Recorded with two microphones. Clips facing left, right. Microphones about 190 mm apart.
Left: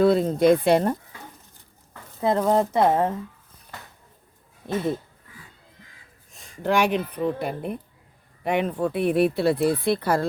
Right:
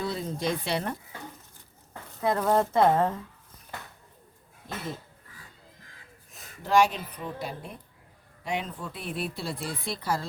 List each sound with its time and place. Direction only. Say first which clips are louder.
0.0 s speech: left 13 dB; 60° left (ahead or behind); by 0.9 s 45° left (ahead or behind)
2.4 s speech: left 2 dB; 15° left (ahead or behind)
4.7 s speech: left 12 dB; 65° left (ahead or behind)
6.3 s a sound: even; 5° right (ahead or behind)
6.6 s speech: left 2 dB; 60° left (ahead or behind)